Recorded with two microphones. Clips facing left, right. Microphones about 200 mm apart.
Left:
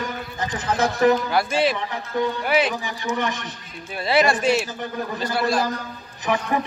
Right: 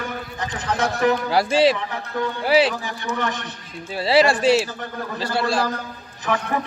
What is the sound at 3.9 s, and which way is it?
A man's voice, 30° right (ahead or behind).